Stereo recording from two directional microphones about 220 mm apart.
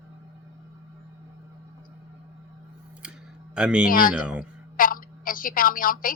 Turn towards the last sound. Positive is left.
turn(degrees=40)  # may be behind; listen again after turning